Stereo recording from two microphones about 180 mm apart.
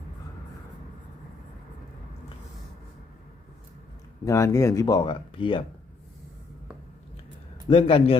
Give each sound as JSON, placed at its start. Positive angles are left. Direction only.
{"t": 4.3, "sound": "speech", "side_deg": 15}
{"t": 7.7, "sound": "a man's voice", "side_deg": 30}